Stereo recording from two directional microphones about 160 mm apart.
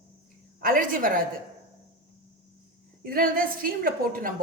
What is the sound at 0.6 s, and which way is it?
Speech, 60° right (ahead or behind).